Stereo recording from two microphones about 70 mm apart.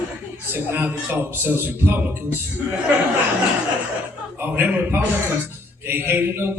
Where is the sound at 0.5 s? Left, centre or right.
Right.